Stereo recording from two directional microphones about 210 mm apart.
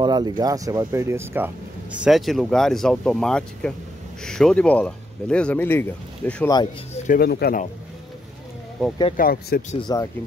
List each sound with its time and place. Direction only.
0.0 s speech: 20° right (ahead or behind); by 6.5 s 10° left (ahead or behind)
6.9 s speech: 40° left (ahead or behind)
9.1 s speech: 45° left (ahead or behind)
9.8 s speech: 20° left (ahead or behind)